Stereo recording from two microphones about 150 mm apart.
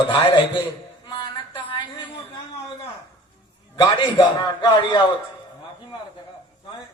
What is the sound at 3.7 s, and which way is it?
A man's voice, 30° left (ahead or behind).